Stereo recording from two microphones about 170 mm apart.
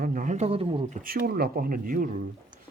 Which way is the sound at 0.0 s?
50° right (ahead or behind).